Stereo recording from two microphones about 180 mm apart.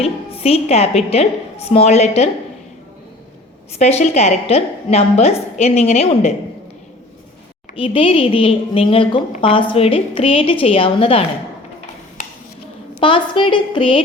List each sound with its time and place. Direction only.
0.0 s a woman's voice: 35° left (ahead or behind)
3.8 s a woman's voice: 35° left (ahead or behind)
7.8 s a woman's voice: 30° left (ahead or behind)
13.0 s a woman's voice: 30° left (ahead or behind)